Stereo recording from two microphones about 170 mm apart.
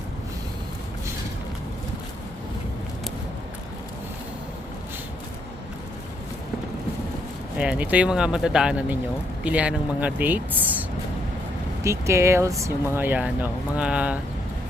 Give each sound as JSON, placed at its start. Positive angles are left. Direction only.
{"t": 7.6, "sound": "speech", "side_deg": -5}